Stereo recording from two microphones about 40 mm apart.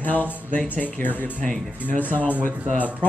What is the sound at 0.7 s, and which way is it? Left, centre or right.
Speech, left.